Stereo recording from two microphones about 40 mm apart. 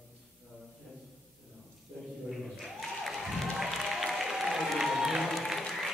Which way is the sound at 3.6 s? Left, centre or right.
Centre.